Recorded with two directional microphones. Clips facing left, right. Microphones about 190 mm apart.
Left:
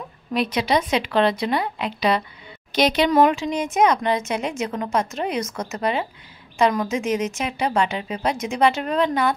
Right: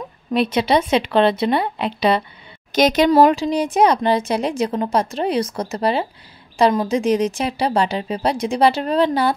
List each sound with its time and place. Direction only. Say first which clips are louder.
0.3 s a woman's voice: right 4 dB; 30° right (ahead or behind)
2.7 s speech: right 4 dB; 45° right (ahead or behind)